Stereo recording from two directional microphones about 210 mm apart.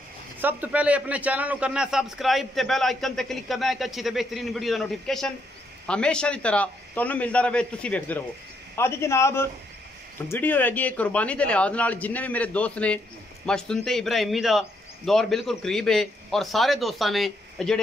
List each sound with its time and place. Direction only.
0.4 s a man's voice: 10° right (ahead or behind)